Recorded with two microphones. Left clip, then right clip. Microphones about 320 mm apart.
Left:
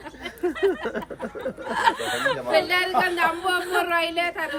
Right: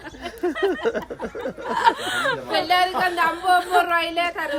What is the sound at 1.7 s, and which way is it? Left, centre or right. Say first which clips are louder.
Speech: right 3 dB; centre.